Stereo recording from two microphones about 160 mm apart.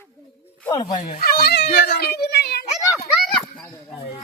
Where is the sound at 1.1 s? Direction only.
70° left (ahead or behind).